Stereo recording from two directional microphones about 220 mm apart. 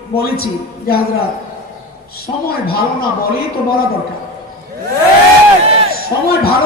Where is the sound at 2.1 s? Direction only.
45° left (ahead or behind).